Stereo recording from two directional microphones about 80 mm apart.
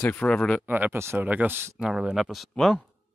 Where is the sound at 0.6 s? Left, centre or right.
Right.